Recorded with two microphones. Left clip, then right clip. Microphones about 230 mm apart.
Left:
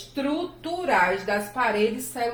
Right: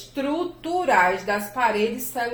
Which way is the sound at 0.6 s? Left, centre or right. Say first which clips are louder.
Right 3 dB; right.